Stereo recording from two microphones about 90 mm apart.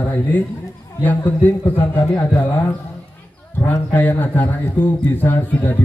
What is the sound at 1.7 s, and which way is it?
Speech, 25° left (ahead or behind).